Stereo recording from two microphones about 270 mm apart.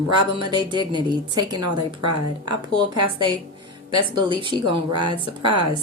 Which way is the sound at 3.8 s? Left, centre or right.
Centre.